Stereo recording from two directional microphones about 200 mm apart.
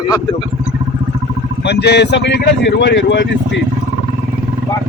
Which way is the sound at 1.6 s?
55° left (ahead or behind).